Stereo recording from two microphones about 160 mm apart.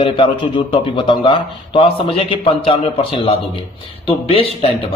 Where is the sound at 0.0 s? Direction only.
30° left (ahead or behind).